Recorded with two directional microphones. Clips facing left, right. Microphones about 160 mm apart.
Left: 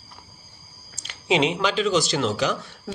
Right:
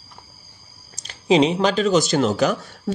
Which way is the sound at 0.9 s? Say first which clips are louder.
Right 6 dB; 35° right (ahead or behind).